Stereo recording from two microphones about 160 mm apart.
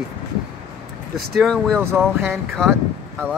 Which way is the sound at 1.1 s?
Centre (ahead or behind).